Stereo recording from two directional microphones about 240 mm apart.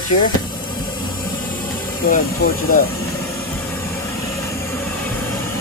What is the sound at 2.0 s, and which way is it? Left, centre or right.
Speech, left.